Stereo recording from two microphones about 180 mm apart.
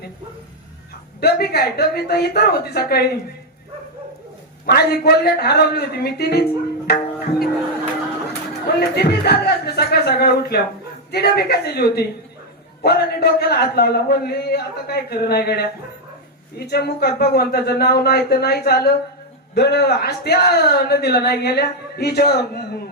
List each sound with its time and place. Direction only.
1.2 s speech: 60° left (ahead or behind)
4.6 s speech: 60° left (ahead or behind)
6.8 s music: 55° left (ahead or behind)
9.0 s speech: 60° left (ahead or behind)